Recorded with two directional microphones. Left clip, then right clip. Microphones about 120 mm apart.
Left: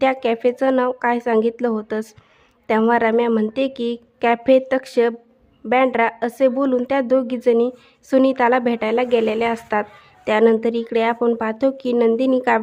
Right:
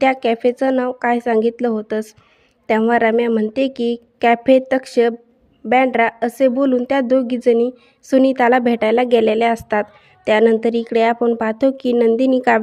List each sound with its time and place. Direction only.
0.0 s a woman's voice: 25° right (ahead or behind)